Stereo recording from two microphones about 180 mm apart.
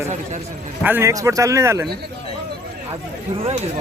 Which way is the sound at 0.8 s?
15° right (ahead or behind).